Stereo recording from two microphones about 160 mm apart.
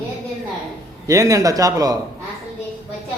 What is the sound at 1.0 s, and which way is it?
Speech, 20° right (ahead or behind).